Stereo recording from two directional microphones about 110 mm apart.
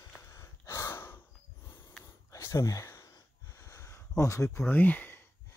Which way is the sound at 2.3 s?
25° left (ahead or behind).